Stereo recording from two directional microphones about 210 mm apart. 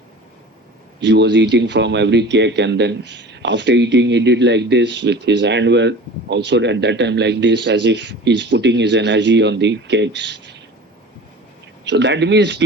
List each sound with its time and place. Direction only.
0.9 s speech: 55° right (ahead or behind)
11.9 s speech: 55° right (ahead or behind)